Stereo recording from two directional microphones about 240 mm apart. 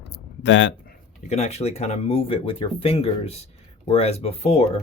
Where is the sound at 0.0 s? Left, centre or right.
Left.